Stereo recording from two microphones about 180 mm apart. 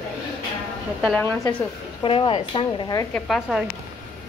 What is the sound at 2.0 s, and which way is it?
Speech, 30° left (ahead or behind).